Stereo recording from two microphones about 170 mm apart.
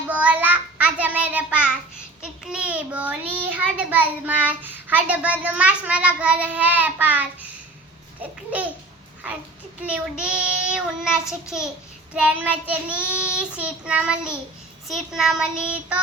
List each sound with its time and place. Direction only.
0.1 s child singing: 10° right (ahead or behind)
9.8 s child singing: 5° right (ahead or behind)